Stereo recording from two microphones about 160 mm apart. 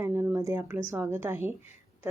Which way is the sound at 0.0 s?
20° right (ahead or behind).